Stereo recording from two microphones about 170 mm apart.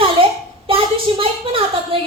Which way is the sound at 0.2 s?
30° right (ahead or behind).